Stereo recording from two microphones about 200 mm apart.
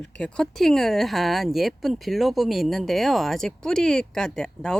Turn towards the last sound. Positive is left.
turn(degrees=5)  # may be behind; listen again after turning